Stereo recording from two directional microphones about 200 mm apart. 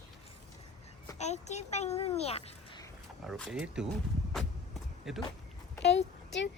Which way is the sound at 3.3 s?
5° right (ahead or behind).